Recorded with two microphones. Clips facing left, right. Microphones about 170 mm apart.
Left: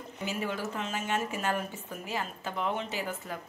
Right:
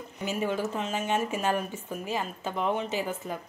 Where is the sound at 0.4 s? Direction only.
20° right (ahead or behind).